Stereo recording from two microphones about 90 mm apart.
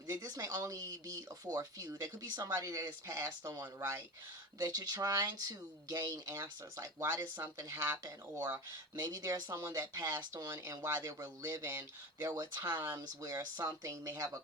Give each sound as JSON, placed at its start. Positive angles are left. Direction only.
{"t": 0.1, "sound": "speech", "side_deg": -40}
{"t": 4.6, "sound": "speech", "side_deg": -45}
{"t": 9.0, "sound": "speech", "side_deg": -40}
{"t": 12.6, "sound": "speech", "side_deg": -25}
{"t": 13.0, "sound": "speech", "side_deg": -40}